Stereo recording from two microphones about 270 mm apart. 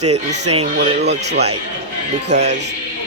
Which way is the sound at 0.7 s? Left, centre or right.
Right.